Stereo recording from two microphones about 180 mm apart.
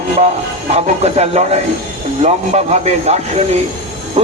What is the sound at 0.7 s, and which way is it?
A man's voice, 35° right (ahead or behind).